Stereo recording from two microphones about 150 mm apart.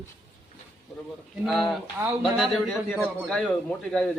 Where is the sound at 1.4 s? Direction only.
Centre (ahead or behind).